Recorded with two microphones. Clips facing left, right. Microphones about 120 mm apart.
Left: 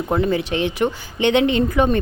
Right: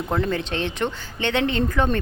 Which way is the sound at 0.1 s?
10° left (ahead or behind).